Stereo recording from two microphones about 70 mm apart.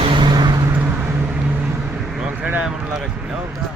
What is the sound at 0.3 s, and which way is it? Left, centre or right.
Vehicle, right.